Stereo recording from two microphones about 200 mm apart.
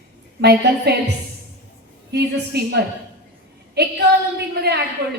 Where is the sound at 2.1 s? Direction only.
55° right (ahead or behind).